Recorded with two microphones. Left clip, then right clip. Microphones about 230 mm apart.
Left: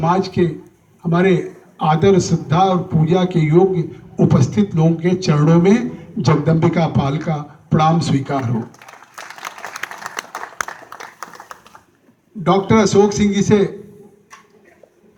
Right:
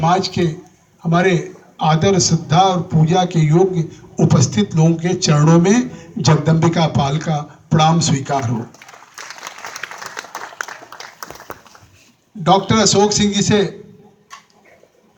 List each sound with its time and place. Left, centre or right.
0.0 s a man's voice: right
9.1 s applause: left
12.4 s a man's voice: right